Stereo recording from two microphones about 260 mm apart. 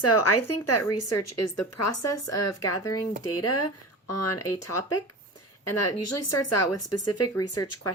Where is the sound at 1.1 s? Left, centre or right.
Left.